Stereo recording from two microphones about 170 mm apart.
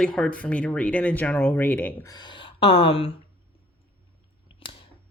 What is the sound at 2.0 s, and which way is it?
Speech, 25° left (ahead or behind).